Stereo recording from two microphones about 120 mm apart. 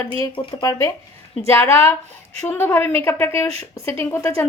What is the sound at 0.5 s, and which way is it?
A woman's voice, 25° left (ahead or behind).